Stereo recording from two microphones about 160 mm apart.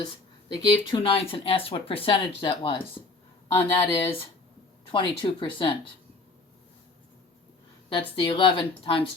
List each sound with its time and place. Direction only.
0.0 s speech: 30° left (ahead or behind)
8.2 s speech: 30° left (ahead or behind)